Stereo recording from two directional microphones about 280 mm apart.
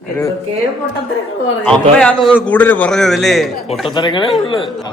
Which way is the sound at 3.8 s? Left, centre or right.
Centre.